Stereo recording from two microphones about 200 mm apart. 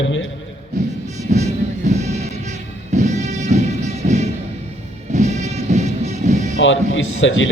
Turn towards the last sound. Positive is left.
turn(degrees=70)  # may be behind; listen again after turning